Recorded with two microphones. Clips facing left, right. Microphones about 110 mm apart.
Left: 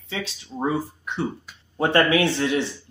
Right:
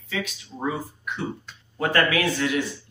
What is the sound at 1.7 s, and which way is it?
Speech, 25° left (ahead or behind).